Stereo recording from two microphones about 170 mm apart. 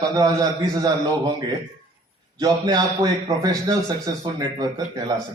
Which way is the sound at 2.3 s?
25° right (ahead or behind).